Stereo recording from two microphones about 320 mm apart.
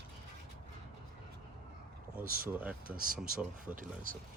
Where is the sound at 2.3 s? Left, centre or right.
Right.